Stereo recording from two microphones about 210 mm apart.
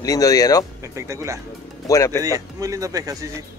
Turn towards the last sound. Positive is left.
turn(degrees=-15)  # may be behind; listen again after turning